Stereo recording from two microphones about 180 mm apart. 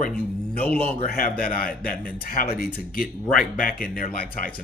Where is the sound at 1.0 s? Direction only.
55° left (ahead or behind).